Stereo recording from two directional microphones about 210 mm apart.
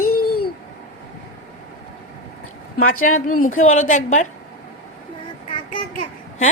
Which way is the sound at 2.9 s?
40° left (ahead or behind).